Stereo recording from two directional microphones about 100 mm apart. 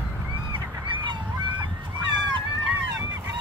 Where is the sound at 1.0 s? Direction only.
50° right (ahead or behind).